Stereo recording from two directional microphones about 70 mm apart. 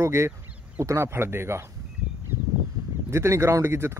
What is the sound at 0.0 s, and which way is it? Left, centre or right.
Speech, right.